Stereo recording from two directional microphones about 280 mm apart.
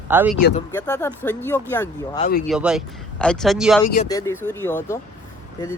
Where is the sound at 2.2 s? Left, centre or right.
Left.